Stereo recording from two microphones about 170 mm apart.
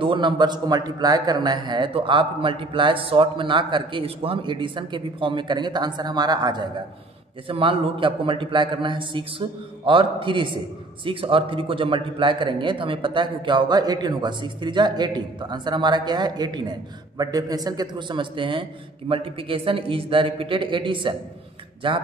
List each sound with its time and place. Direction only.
0.0 s a man's voice: 30° right (ahead or behind)